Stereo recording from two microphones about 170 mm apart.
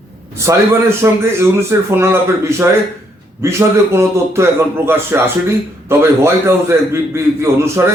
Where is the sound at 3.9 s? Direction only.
15° right (ahead or behind).